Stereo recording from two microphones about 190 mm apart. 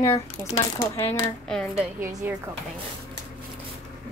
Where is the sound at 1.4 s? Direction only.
5° left (ahead or behind).